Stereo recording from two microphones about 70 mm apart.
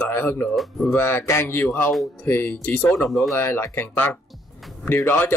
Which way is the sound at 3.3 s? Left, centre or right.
Left.